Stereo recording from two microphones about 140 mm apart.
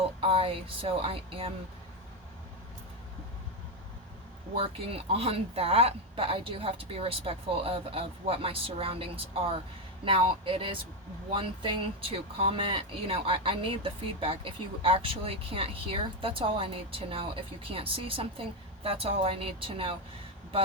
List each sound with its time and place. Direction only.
0.0 s speech: 45° right (ahead or behind)
4.5 s speech: 45° right (ahead or behind)